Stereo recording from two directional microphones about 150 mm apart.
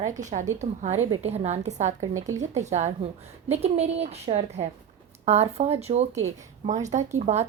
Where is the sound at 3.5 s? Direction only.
45° right (ahead or behind).